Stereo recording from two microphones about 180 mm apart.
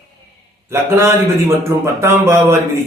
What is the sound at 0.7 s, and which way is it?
A man's voice, 15° right (ahead or behind).